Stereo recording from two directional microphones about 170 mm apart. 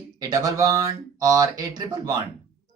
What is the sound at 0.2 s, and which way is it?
A woman's voice, 20° right (ahead or behind).